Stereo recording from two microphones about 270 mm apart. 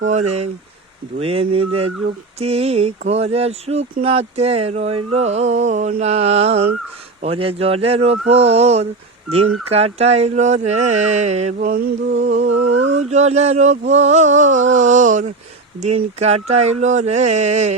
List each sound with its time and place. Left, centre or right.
0.1 s speech: right
12.2 s speech: right